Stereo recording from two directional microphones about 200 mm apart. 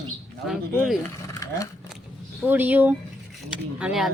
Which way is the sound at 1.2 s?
15° left (ahead or behind).